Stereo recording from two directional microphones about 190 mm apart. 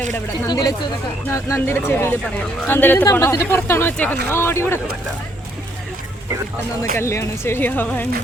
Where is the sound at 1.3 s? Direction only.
15° left (ahead or behind).